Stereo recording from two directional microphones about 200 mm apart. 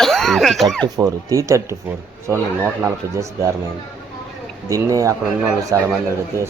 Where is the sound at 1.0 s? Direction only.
15° right (ahead or behind).